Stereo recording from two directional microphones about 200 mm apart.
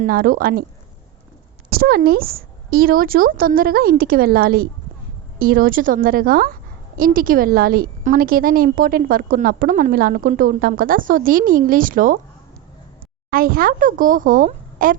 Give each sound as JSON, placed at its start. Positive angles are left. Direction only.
{"t": 0.0, "sound": "a woman's voice", "side_deg": -45}
{"t": 1.7, "sound": "a woman's voice", "side_deg": -50}
{"t": 13.3, "sound": "a woman's voice", "side_deg": -45}